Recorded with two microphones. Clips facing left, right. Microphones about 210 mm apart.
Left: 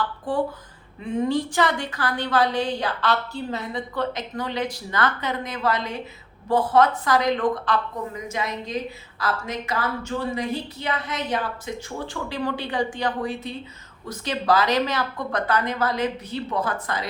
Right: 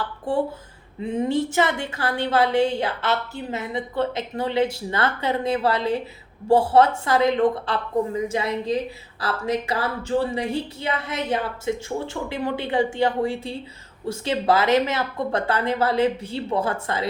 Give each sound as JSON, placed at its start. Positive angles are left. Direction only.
{"t": 0.0, "sound": "a woman's voice", "side_deg": -25}